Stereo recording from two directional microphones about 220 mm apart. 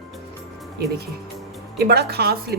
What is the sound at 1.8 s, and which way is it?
Speech, 45° right (ahead or behind).